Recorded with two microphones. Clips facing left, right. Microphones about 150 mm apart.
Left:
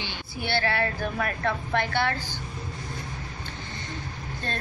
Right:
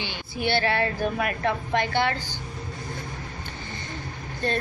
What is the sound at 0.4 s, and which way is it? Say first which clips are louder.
A woman's voice: right 3 dB; 20° right (ahead or behind).